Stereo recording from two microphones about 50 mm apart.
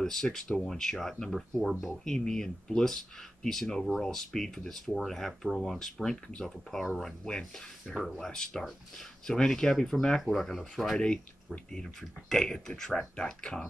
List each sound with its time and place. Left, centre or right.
0.0 s speech: centre